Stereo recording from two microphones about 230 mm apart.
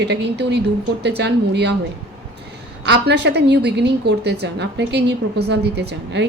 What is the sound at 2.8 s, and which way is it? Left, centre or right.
A woman's voice, right.